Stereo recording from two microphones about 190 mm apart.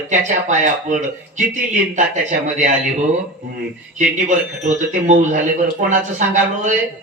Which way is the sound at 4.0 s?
40° right (ahead or behind).